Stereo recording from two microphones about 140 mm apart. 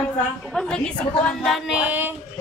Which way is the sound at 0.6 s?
5° left (ahead or behind).